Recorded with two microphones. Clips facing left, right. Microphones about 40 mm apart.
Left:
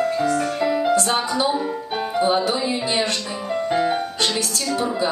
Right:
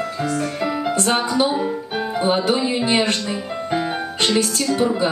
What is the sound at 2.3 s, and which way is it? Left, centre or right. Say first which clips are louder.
Speech: right 2 dB; right.